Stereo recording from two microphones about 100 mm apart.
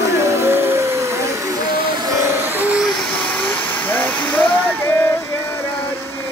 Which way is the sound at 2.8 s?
Centre (ahead or behind).